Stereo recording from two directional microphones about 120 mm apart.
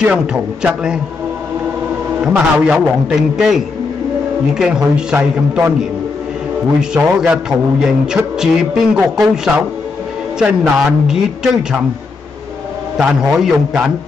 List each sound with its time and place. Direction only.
0.0 s a man's voice: 10° right (ahead or behind)
2.2 s a man's voice: 5° right (ahead or behind)
6.8 s a man's voice: 5° right (ahead or behind)
12.9 s a man's voice: 5° right (ahead or behind)